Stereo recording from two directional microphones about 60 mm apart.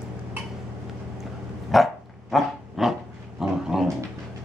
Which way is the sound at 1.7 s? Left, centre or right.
Centre.